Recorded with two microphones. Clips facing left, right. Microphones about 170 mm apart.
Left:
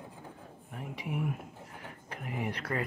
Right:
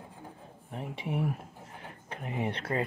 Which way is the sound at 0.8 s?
25° right (ahead or behind).